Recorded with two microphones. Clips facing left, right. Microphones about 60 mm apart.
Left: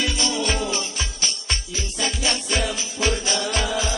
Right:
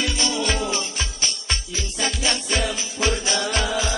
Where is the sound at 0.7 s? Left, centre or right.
Right.